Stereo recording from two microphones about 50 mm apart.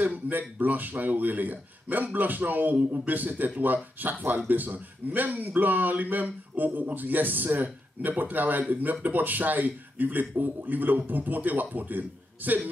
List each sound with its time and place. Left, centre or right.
0.0 s speech: right